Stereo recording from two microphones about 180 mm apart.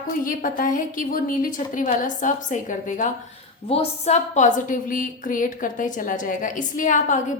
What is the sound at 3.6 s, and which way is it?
A woman's voice, 35° left (ahead or behind).